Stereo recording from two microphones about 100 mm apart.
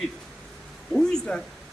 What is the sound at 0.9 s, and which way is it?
Speech, 5° left (ahead or behind).